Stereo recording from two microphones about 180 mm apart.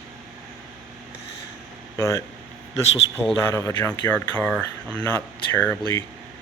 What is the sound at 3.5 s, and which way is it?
Speech, 10° left (ahead or behind).